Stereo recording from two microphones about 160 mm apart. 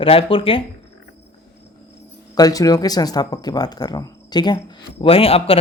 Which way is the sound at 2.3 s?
20° left (ahead or behind).